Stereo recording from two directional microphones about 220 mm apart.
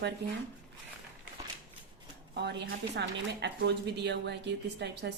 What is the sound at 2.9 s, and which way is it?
Speech, 50° right (ahead or behind).